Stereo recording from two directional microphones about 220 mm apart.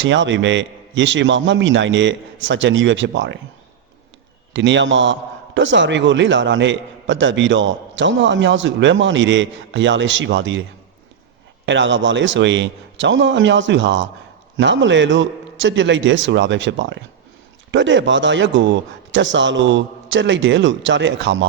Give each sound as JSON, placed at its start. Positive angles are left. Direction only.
{"t": 0.0, "sound": "a man's voice", "side_deg": -55}
{"t": 4.5, "sound": "a man's voice", "side_deg": -55}